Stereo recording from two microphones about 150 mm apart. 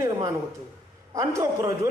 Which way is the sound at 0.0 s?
25° right (ahead or behind).